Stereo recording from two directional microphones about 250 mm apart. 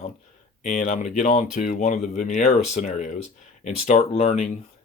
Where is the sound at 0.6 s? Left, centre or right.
Left.